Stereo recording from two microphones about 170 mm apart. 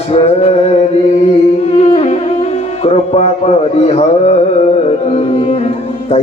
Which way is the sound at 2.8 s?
35° left (ahead or behind).